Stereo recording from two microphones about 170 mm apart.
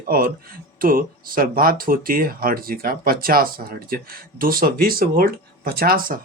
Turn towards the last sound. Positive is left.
turn(degrees=-60)  # may be behind; listen again after turning